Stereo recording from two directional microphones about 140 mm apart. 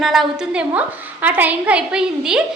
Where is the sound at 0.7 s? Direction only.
10° right (ahead or behind).